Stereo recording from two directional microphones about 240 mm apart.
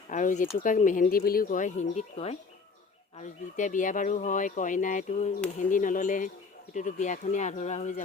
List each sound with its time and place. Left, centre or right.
0.1 s speech: left